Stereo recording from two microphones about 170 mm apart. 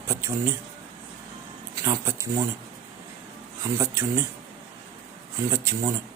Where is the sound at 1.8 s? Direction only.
15° right (ahead or behind).